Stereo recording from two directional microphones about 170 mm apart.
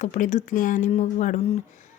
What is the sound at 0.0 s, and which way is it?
Speech, 45° left (ahead or behind).